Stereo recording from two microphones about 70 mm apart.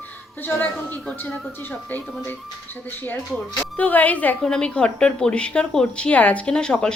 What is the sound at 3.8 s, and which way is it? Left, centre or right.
Speech, left.